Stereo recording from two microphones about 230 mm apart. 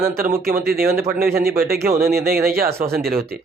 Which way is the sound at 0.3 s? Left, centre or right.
Right.